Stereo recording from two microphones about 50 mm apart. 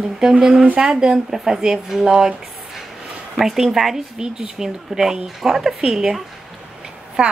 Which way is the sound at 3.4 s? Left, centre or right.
Centre.